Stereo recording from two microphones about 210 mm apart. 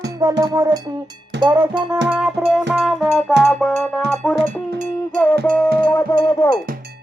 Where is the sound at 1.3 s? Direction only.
55° right (ahead or behind).